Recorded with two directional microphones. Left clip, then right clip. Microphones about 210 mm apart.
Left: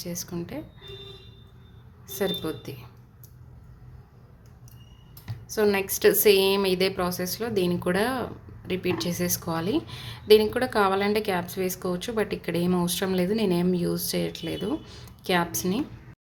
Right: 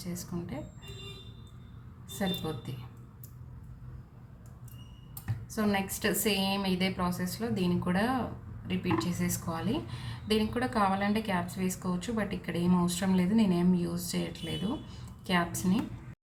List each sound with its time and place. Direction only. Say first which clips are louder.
0.0 s a woman's voice: left 6 dB; 45° left (ahead or behind)
2.1 s a woman's voice: left 7 dB; 45° left (ahead or behind)
5.5 s a woman's voice: left 8 dB; 45° left (ahead or behind)